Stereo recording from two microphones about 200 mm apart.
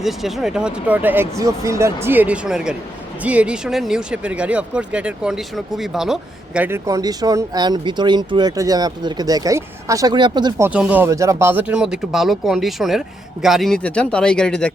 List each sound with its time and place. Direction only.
0.0 s speech: centre (ahead or behind); by 10.7 s 20° right (ahead or behind)
10.7 s speech: 5° right (ahead or behind)